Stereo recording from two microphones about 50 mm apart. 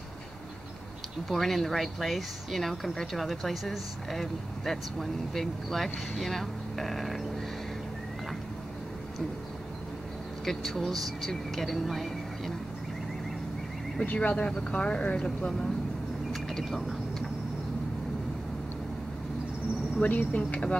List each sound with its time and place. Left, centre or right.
1.3 s speech: centre
10.4 s speech: centre
14.0 s speech: left
16.3 s a sound: centre
20.1 s speech: left